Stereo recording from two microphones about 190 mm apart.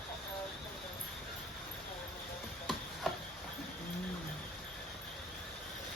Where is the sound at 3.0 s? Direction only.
Centre (ahead or behind).